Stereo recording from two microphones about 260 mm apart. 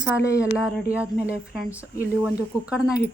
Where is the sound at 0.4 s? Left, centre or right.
Centre.